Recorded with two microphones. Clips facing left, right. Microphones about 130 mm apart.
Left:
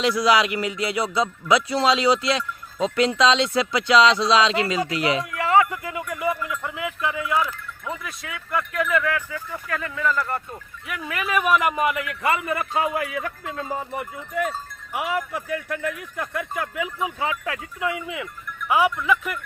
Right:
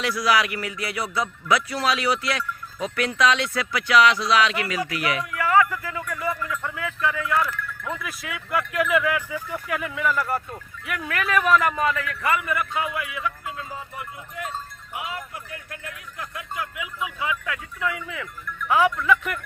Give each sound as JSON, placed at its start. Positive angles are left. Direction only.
{"t": 0.0, "sound": "speech", "side_deg": 20}
{"t": 7.9, "sound": "speech", "side_deg": 0}
{"t": 14.9, "sound": "speech", "side_deg": 75}
{"t": 17.0, "sound": "speech", "side_deg": 35}
{"t": 17.7, "sound": "speech", "side_deg": 20}